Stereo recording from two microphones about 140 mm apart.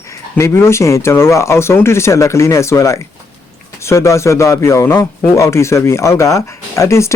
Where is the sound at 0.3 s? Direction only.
20° left (ahead or behind).